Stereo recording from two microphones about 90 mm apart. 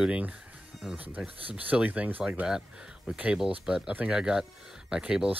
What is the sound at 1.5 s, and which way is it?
Speech, 15° right (ahead or behind).